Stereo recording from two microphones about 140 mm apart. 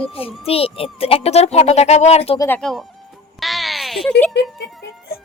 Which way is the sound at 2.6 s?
Centre (ahead or behind).